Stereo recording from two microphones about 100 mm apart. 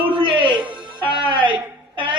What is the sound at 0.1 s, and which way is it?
Music, 60° right (ahead or behind).